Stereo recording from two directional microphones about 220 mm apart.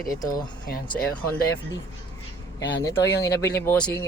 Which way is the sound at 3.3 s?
50° left (ahead or behind).